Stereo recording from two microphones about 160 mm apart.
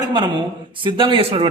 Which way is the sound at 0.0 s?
25° right (ahead or behind).